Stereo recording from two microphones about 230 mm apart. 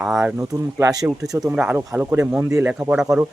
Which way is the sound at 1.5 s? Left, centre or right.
Centre.